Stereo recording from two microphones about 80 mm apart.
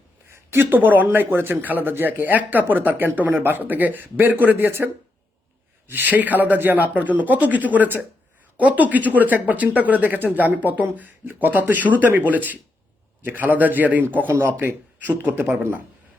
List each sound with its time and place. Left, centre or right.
0.3 s speech: right
5.9 s speech: right